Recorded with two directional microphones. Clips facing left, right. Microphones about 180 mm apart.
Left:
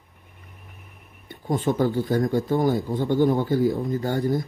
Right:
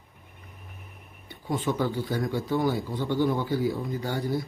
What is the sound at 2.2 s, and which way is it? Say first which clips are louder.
Speech: left 5 dB; 20° left (ahead or behind).